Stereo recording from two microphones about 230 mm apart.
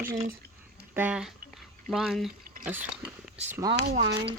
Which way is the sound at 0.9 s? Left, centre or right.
Centre.